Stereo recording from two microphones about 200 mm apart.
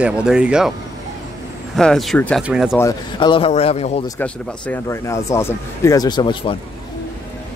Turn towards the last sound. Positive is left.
turn(degrees=25)  # may be behind; listen again after turning